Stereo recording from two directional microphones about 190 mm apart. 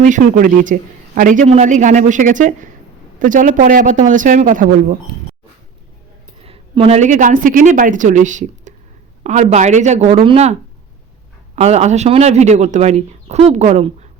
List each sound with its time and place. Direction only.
0.0 s a man's voice: 45° right (ahead or behind)
6.4 s a woman's voice: 30° right (ahead or behind)